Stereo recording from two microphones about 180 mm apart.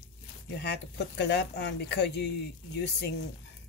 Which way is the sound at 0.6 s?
70° left (ahead or behind).